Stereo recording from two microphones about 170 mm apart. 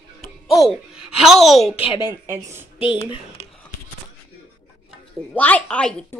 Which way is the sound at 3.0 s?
35° left (ahead or behind).